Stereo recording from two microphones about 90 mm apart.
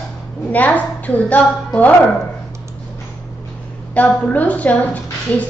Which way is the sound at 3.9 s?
15° left (ahead or behind).